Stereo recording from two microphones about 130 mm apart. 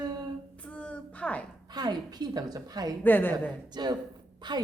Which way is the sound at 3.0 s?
15° left (ahead or behind).